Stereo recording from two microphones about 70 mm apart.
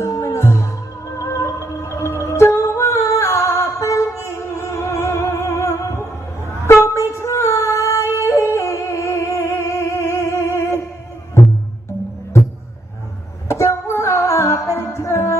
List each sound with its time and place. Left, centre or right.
0.0 s music: left
6.6 s female singing: left
13.6 s music: left